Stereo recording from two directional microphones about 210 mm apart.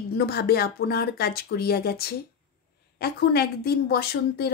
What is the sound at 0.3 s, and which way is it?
Speech, 50° left (ahead or behind).